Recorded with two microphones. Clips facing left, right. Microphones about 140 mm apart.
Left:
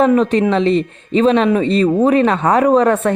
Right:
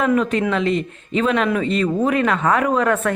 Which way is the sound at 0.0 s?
30° left (ahead or behind).